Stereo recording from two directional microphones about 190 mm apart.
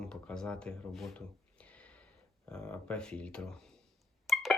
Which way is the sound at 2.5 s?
5° left (ahead or behind).